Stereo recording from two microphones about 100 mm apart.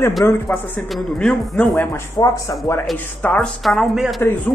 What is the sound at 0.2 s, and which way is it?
Speech, 25° left (ahead or behind).